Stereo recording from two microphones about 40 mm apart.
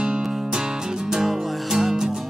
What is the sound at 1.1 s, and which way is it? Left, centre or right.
Music, centre.